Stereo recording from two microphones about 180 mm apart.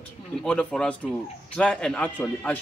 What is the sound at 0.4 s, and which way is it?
A man's voice, 5° left (ahead or behind).